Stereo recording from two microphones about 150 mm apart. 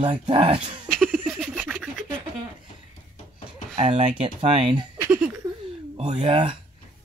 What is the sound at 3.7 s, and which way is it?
Speech, 45° right (ahead or behind).